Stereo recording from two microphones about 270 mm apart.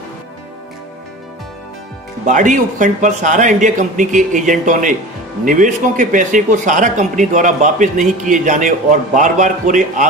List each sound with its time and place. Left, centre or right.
2.2 s speech: right